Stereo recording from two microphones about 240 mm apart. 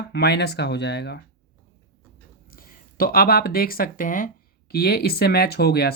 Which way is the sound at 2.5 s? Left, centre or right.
Left.